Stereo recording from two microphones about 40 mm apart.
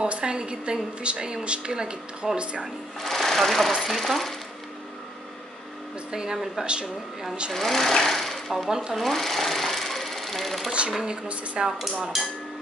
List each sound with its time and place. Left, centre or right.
0.0 s speech: right
3.0 s speech: centre
6.1 s speech: centre
6.6 s speech: right
7.5 s speech: centre
8.6 s speech: centre
9.1 s sewing machine: centre
11.6 s speech: centre
12.1 s speech: centre